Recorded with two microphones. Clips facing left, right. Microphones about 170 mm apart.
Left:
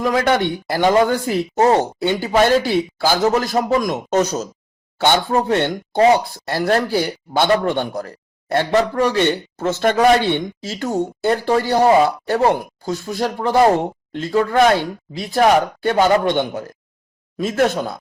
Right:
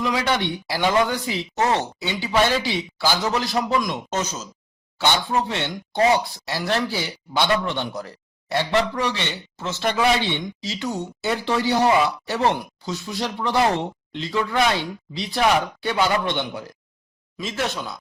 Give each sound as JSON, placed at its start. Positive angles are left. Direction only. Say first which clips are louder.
{"t": 0.0, "sound": "a man's voice", "louder": "left 6 dB", "side_deg": 50}
{"t": 4.9, "sound": "a man's voice", "louder": "left 5 dB", "side_deg": 50}